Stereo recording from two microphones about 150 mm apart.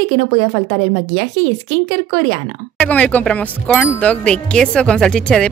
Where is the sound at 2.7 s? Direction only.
10° left (ahead or behind).